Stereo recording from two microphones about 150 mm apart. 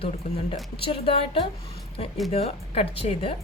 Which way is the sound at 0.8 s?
35° left (ahead or behind).